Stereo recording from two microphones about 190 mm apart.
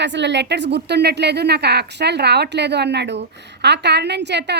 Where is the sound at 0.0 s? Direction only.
65° right (ahead or behind).